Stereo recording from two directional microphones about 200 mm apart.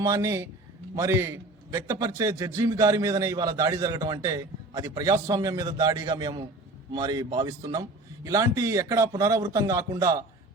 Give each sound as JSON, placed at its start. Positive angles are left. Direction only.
{"t": 0.0, "sound": "a man's voice", "side_deg": -15}